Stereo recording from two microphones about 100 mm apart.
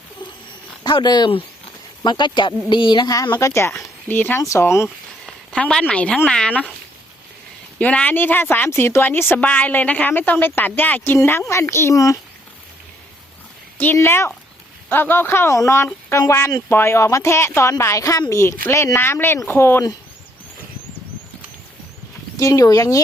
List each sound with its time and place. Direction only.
0.9 s speech: 45° left (ahead or behind)
3.4 s speech: 30° left (ahead or behind)
3.7 s speech: 5° left (ahead or behind)
4.1 s speech: 20° left (ahead or behind)
5.2 s a woman's voice: 10° left (ahead or behind)
7.8 s speech: 15° left (ahead or behind); by 12.2 s 35° left (ahead or behind)
13.7 s speech: 20° left (ahead or behind)
22.4 s speech: 35° left (ahead or behind)